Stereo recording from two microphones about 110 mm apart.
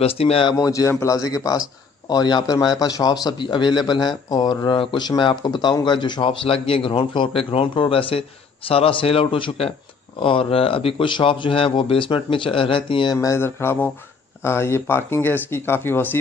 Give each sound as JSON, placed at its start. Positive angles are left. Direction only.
{"t": 0.0, "sound": "speech", "side_deg": 60}
{"t": 0.5, "sound": "a man's voice", "side_deg": 30}
{"t": 13.2, "sound": "speech", "side_deg": 25}